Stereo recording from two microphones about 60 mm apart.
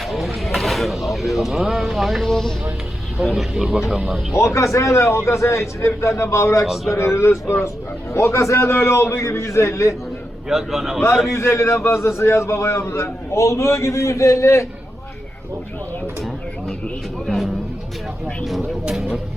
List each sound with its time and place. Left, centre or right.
0.1 s a sound: centre
3.2 s speech: centre
3.7 s speech: centre
4.4 s a man's voice: left
10.5 s speech: centre
11.3 s a man's voice: left
17.2 s music: centre
18.4 s a sound: centre